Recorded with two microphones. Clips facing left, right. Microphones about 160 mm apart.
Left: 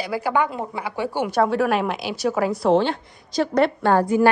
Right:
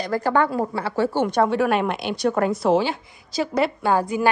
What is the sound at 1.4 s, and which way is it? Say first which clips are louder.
A woman's voice: left 1 dB; centre (ahead or behind).